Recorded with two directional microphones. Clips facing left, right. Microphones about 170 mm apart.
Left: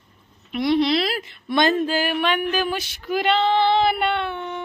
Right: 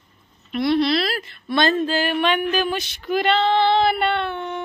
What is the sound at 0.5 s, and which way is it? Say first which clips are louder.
Speech: even; 15° left (ahead or behind).